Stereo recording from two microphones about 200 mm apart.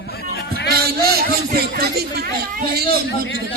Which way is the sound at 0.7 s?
50° right (ahead or behind).